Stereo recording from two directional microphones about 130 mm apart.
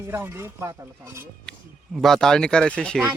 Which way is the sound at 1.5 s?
Centre (ahead or behind).